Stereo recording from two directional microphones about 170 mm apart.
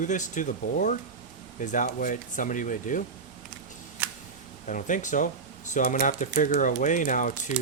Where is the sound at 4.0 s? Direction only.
10° right (ahead or behind).